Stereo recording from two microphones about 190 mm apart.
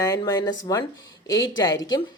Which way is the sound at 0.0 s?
20° left (ahead or behind).